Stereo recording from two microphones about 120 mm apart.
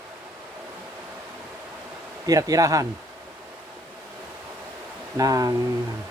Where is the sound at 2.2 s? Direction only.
30° right (ahead or behind).